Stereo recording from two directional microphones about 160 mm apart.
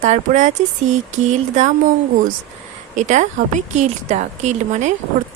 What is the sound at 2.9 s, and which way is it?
A woman's voice, 50° right (ahead or behind).